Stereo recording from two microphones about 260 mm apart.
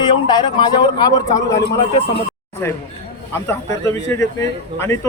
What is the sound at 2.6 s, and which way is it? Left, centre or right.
Speech, centre.